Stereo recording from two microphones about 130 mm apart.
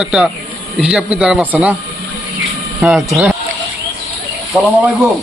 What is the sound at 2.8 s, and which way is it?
Speech, centre (ahead or behind).